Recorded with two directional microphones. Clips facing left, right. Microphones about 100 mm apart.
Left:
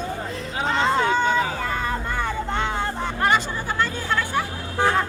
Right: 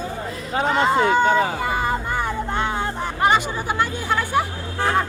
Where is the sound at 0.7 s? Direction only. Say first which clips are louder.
Right 2 dB; 5° right (ahead or behind).